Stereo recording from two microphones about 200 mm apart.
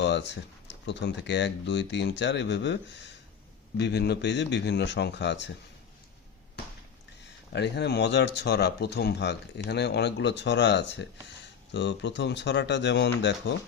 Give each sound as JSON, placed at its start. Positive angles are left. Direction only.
{"t": 0.0, "sound": "a sound", "side_deg": 60}
{"t": 0.7, "sound": "speech", "side_deg": 60}
{"t": 3.8, "sound": "speech", "side_deg": 55}
{"t": 7.5, "sound": "speech", "side_deg": 60}